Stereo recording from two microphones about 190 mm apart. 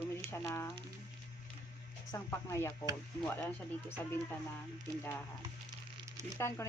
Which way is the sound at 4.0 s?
10° left (ahead or behind).